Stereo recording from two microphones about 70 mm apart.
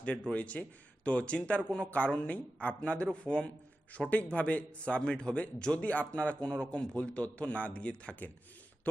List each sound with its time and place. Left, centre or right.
0.0 s a man's voice: centre